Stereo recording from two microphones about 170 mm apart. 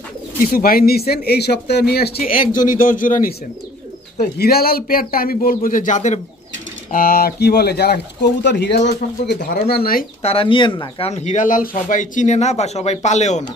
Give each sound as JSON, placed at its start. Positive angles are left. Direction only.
{"t": 0.5, "sound": "a man's voice", "side_deg": 60}
{"t": 2.5, "sound": "speech", "side_deg": 50}
{"t": 4.4, "sound": "a man's voice", "side_deg": 65}
{"t": 6.9, "sound": "speech", "side_deg": 60}
{"t": 9.4, "sound": "a man's voice", "side_deg": 65}
{"t": 10.2, "sound": "a man's voice", "side_deg": 35}